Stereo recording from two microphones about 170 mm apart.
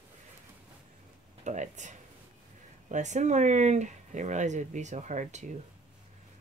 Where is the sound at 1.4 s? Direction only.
45° right (ahead or behind).